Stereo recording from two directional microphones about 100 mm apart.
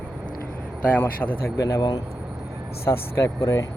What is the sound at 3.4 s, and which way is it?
Speech, 35° left (ahead or behind).